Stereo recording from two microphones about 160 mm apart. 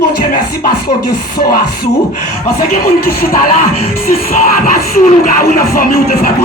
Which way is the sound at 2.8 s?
70° left (ahead or behind).